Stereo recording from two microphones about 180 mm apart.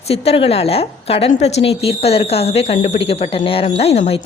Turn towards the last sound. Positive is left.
turn(degrees=35)  # may be behind; listen again after turning